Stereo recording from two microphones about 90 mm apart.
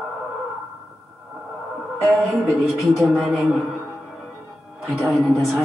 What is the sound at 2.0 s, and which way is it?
A man's voice, centre (ahead or behind).